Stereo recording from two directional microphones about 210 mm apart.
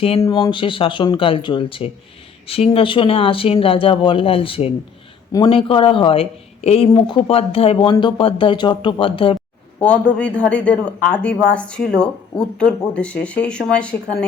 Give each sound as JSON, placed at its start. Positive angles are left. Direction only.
{"t": 0.2, "sound": "speech", "side_deg": 15}
{"t": 9.8, "sound": "speech", "side_deg": 5}